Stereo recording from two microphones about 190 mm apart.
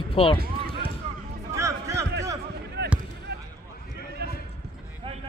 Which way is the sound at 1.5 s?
15° right (ahead or behind).